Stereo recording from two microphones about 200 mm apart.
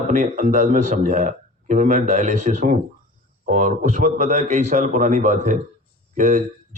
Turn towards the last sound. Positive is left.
turn(degrees=-40)  # may be behind; listen again after turning